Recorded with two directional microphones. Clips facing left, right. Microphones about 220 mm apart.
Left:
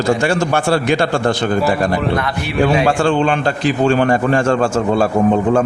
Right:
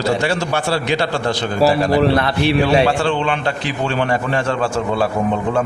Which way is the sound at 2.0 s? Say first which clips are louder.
Right 4 dB; 30° right (ahead or behind).